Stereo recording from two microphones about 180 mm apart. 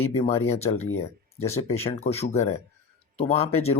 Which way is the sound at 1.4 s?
15° left (ahead or behind).